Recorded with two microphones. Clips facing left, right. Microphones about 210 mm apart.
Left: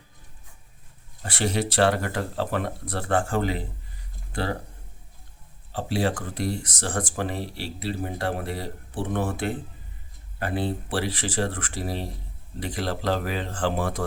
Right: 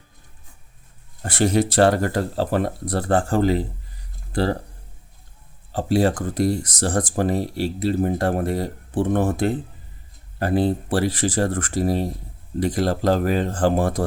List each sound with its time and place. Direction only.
1.2 s speech: 45° right (ahead or behind)
5.7 s speech: 45° right (ahead or behind)